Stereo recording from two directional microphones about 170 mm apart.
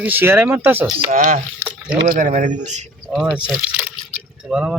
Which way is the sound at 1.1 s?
50° right (ahead or behind).